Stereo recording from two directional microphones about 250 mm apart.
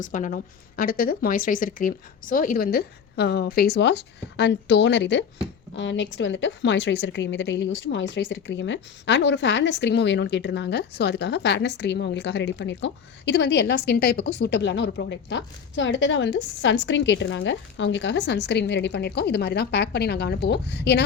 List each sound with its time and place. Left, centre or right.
0.0 s a woman's voice: left